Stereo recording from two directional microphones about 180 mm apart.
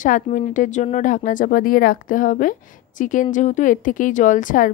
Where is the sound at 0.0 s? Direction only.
45° left (ahead or behind).